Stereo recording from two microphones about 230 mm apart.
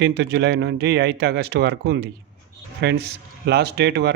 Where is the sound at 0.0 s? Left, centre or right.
Right.